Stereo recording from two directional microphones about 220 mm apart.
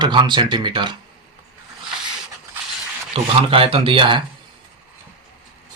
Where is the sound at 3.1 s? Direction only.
25° right (ahead or behind).